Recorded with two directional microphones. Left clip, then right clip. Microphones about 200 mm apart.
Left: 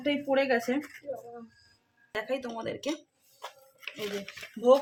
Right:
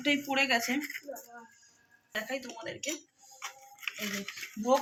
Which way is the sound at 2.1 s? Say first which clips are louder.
Left 4 dB; 50° left (ahead or behind).